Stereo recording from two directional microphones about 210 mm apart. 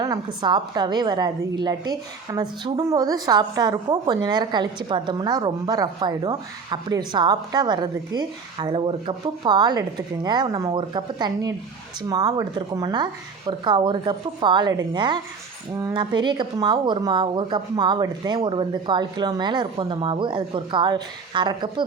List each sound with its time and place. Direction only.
0.0 s a woman's voice: 20° right (ahead or behind)